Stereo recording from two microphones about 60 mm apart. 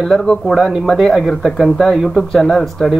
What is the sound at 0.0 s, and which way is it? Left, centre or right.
Speech, centre.